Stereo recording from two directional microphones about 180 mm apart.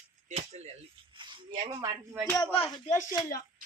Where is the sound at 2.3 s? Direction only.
30° left (ahead or behind).